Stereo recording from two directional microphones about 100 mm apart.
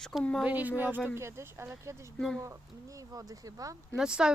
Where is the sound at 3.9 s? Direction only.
5° right (ahead or behind).